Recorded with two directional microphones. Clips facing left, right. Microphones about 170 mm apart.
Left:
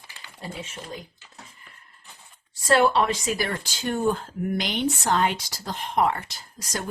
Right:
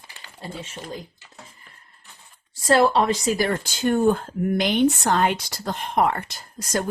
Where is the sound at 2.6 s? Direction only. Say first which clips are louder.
Right 2 dB; 35° right (ahead or behind).